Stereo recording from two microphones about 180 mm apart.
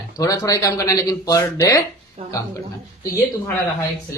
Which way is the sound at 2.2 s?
35° right (ahead or behind).